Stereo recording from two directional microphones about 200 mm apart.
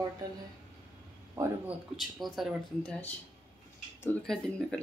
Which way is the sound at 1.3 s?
15° right (ahead or behind).